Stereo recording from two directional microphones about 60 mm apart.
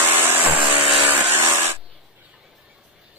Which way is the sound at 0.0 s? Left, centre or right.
Right.